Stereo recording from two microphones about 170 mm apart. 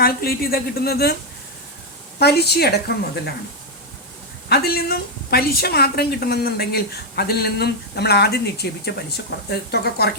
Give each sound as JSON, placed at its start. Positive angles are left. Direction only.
{"t": 0.0, "sound": "speech", "side_deg": 60}
{"t": 2.1, "sound": "a woman's voice", "side_deg": 70}
{"t": 4.4, "sound": "a woman's voice", "side_deg": 70}